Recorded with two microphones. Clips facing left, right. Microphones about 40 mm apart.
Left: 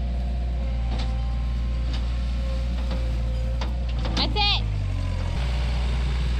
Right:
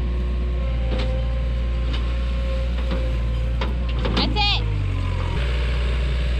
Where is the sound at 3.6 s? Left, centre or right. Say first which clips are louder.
Right 9 dB; right.